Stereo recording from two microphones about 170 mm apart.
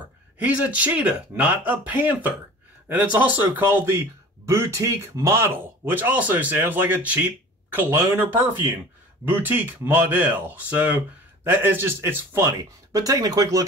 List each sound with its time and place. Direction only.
0.4 s speech: 10° right (ahead or behind)